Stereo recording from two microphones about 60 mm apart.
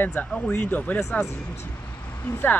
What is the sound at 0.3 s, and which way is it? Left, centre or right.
Speech, centre.